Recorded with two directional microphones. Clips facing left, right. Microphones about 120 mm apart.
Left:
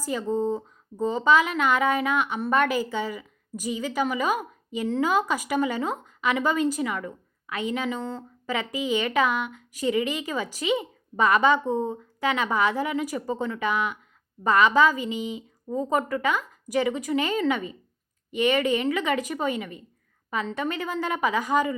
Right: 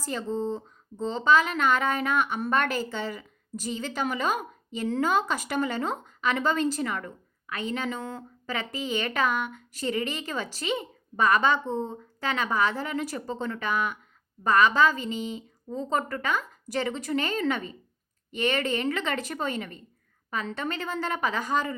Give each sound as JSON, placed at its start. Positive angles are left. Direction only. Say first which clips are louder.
{"t": 0.0, "sound": "a woman's voice", "louder": "left 4 dB", "side_deg": 10}